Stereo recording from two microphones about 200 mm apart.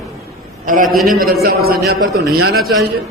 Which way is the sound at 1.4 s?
50° right (ahead or behind).